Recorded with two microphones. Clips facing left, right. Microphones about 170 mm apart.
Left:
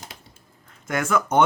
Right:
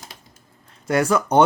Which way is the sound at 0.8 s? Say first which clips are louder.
Right 4 dB; 30° right (ahead or behind).